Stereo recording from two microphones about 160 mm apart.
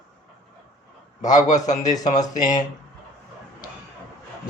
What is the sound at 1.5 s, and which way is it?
A man's voice, 50° left (ahead or behind).